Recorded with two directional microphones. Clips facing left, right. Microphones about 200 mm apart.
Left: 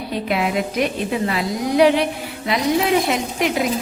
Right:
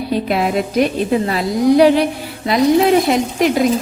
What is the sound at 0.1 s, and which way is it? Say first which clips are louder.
Speech: right 4 dB; 40° right (ahead or behind).